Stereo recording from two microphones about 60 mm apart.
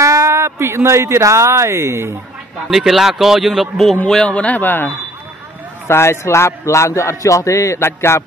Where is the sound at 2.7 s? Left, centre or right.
Centre.